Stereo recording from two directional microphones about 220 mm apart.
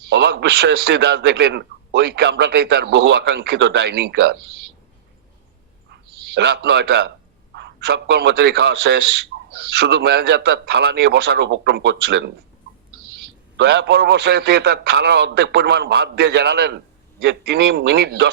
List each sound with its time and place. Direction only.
0.1 s a man's voice: 50° right (ahead or behind)
5.9 s a man's voice: 50° right (ahead or behind)
13.6 s a man's voice: 50° right (ahead or behind)